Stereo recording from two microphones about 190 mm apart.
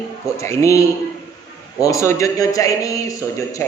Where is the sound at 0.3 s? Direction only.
15° left (ahead or behind).